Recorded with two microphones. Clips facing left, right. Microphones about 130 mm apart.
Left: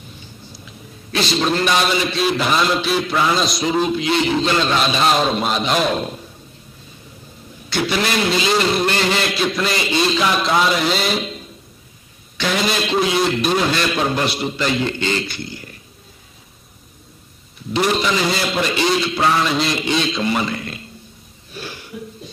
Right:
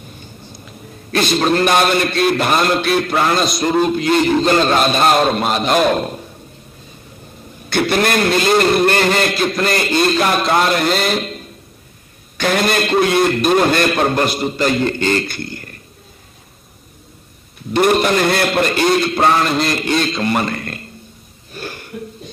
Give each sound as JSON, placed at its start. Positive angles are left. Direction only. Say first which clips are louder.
{"t": 0.2, "sound": "a sound", "louder": "right 3 dB", "side_deg": -50}
{"t": 2.3, "sound": "a man's voice", "louder": "right 3 dB", "side_deg": -50}
{"t": 3.3, "sound": "music", "louder": "right 3 dB", "side_deg": 0}
{"t": 3.9, "sound": "a man's voice", "louder": "right 4 dB", "side_deg": -50}
{"t": 7.7, "sound": "a man's voice", "louder": "right 4 dB", "side_deg": -55}
{"t": 10.4, "sound": "music", "louder": "right 2 dB", "side_deg": 0}
{"t": 12.4, "sound": "a man's voice", "louder": "right 4 dB", "side_deg": -55}
{"t": 17.7, "sound": "a man's voice", "louder": "right 5 dB", "side_deg": -55}
{"t": 19.4, "sound": "music", "louder": "right 2 dB", "side_deg": 0}
{"t": 20.2, "sound": "a sound", "louder": "right 2 dB", "side_deg": -50}